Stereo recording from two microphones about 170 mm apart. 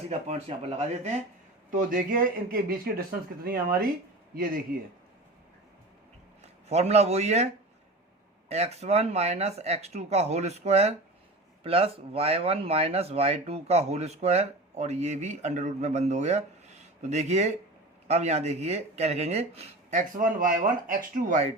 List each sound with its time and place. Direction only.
0.1 s speech: 40° right (ahead or behind)
1.7 s speech: 50° right (ahead or behind)
6.7 s speech: 40° right (ahead or behind)